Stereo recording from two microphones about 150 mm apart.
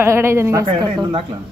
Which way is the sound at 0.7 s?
35° right (ahead or behind).